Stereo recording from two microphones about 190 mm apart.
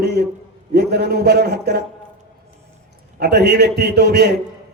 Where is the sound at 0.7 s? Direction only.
55° right (ahead or behind).